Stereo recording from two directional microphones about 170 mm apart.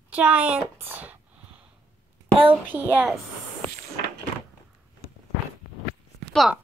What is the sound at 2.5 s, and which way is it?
Speech, 10° right (ahead or behind).